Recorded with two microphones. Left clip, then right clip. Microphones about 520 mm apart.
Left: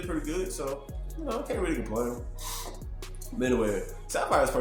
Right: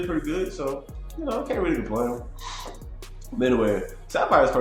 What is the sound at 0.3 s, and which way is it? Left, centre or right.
Speech, left.